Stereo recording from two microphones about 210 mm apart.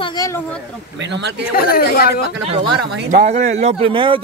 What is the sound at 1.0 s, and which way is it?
Speech, 55° right (ahead or behind).